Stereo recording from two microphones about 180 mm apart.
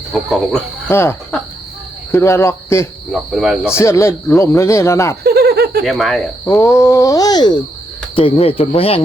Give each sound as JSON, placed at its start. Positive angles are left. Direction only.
{"t": 0.1, "sound": "cricket", "side_deg": 0}
{"t": 0.9, "sound": "speech", "side_deg": 15}
{"t": 2.1, "sound": "speech", "side_deg": 15}
{"t": 3.1, "sound": "cricket", "side_deg": 0}
{"t": 3.7, "sound": "speech", "side_deg": 15}
{"t": 5.2, "sound": "a sound", "side_deg": -60}
{"t": 5.8, "sound": "cricket", "side_deg": 0}
{"t": 6.4, "sound": "speech", "side_deg": 15}